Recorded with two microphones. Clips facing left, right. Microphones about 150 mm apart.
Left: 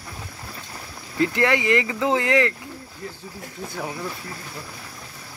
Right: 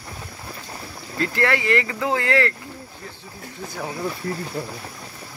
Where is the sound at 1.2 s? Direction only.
15° left (ahead or behind).